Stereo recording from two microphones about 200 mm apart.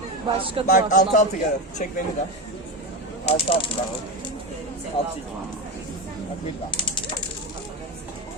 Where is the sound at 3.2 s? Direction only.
30° left (ahead or behind).